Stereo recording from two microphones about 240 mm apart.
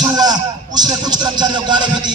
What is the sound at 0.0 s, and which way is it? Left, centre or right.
Speech, centre.